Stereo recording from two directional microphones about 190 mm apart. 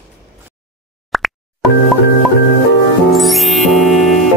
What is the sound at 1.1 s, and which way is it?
Plop, centre (ahead or behind).